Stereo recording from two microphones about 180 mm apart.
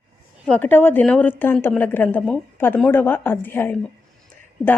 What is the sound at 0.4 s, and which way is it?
A woman's voice, 10° left (ahead or behind).